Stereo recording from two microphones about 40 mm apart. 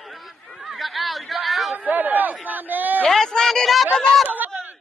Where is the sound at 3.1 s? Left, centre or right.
Centre.